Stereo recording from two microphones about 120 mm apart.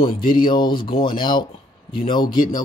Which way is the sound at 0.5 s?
40° left (ahead or behind).